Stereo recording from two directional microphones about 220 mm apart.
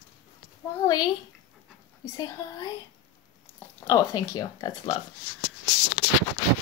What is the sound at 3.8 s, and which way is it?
Speech, 15° left (ahead or behind).